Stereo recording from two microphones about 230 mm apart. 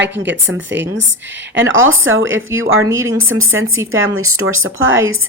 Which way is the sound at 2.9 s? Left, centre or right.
Centre.